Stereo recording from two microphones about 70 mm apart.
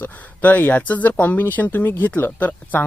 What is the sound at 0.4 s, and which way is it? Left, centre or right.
Speech, left.